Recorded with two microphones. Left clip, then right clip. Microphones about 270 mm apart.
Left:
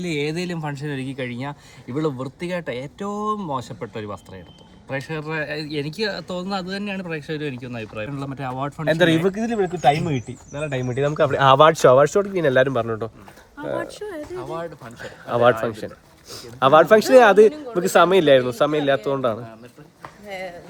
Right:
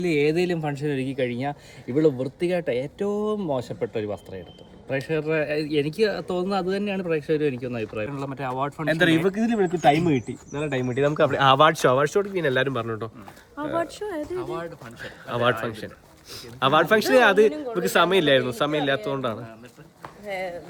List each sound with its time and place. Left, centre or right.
0.0 s speech: centre
3.2 s speech: centre
3.5 s speech: centre
13.8 s speech: right
14.3 s speech: centre
20.2 s speech: centre